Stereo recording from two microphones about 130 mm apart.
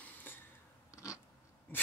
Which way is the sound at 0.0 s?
15° left (ahead or behind).